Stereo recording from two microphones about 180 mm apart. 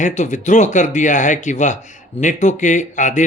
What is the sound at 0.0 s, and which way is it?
Speech, 45° left (ahead or behind).